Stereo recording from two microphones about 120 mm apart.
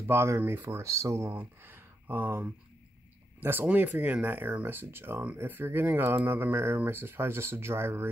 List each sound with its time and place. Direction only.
0.0 s speech: 20° right (ahead or behind)